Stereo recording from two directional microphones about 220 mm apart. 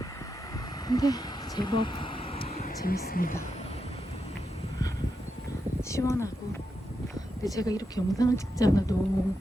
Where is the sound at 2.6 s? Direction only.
40° left (ahead or behind).